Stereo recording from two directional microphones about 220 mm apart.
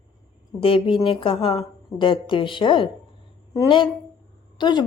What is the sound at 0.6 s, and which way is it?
A woman's voice, 25° left (ahead or behind).